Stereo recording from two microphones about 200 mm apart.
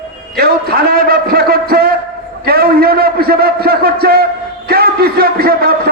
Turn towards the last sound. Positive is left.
turn(degrees=-50)  # may be behind; listen again after turning